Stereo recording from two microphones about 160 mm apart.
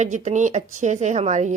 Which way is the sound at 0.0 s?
50° right (ahead or behind).